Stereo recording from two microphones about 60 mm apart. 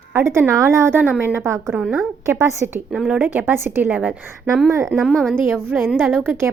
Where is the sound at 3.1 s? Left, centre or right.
Right.